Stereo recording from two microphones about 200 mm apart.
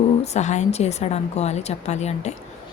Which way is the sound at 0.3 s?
35° left (ahead or behind).